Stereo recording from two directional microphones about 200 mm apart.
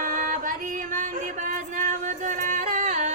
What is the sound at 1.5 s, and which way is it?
Music, 40° right (ahead or behind).